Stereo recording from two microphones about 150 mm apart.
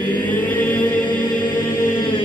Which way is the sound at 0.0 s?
10° left (ahead or behind).